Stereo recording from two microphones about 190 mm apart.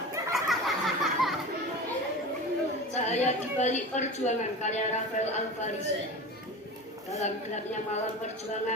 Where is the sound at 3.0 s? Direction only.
35° left (ahead or behind).